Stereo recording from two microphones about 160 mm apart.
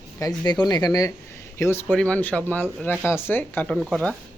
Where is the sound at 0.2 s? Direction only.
25° left (ahead or behind).